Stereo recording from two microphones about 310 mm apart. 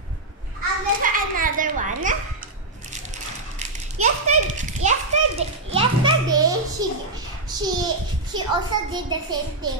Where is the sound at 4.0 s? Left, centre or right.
Right.